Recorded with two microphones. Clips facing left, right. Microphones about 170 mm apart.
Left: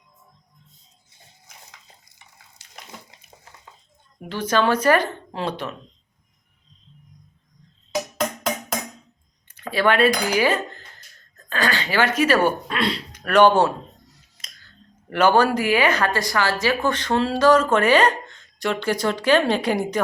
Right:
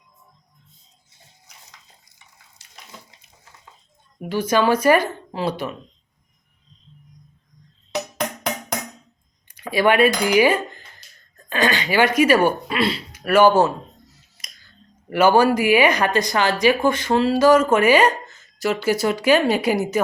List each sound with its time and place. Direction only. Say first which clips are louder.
4.2 s speech: right 2 dB; 10° right (ahead or behind)
7.9 s music: left 1 dB; 15° right (ahead or behind)
9.5 s speech: right 2 dB; 15° right (ahead or behind)
14.4 s scissors: right 1 dB; 10° right (ahead or behind)
15.1 s speech: right 2 dB; 10° right (ahead or behind)